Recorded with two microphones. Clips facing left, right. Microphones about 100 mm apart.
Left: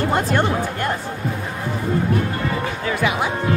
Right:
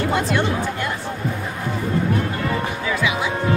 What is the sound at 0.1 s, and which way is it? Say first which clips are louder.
Speech: left 2 dB; 45° left (ahead or behind).